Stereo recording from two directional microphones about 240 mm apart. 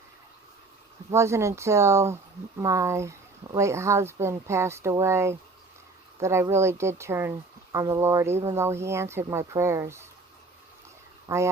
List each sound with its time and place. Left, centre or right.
1.1 s speech: centre
11.3 s speech: centre